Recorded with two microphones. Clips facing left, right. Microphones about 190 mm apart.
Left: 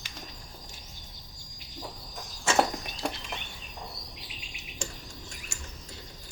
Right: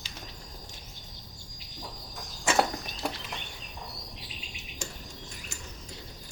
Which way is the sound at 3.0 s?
5° right (ahead or behind).